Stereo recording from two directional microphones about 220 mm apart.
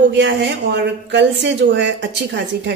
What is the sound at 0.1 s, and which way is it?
Speech, 55° right (ahead or behind).